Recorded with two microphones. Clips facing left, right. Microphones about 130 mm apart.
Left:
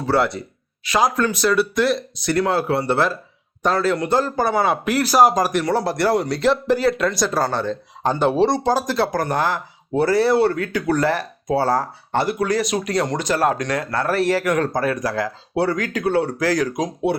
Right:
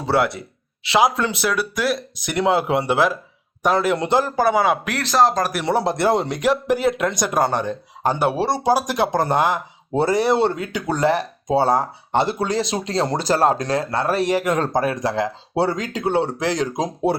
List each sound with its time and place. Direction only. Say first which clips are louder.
0.2 s speech: even; centre (ahead or behind)
2.2 s speech: even; 15° right (ahead or behind)
4.4 s speech: right 1 dB; 5° right (ahead or behind)
5.6 s speech: right 1 dB; 20° right (ahead or behind)